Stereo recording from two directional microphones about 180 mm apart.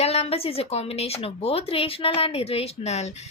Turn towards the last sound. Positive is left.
turn(degrees=35)  # may be behind; listen again after turning